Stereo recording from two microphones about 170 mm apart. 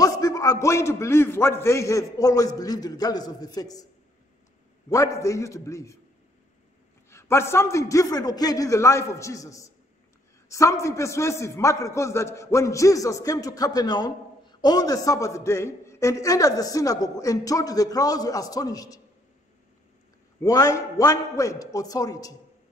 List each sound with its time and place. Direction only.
0.0 s a man's voice: 20° left (ahead or behind)
4.8 s a man's voice: 20° left (ahead or behind)
7.1 s a man's voice: 15° left (ahead or behind)
20.3 s a man's voice: 20° left (ahead or behind)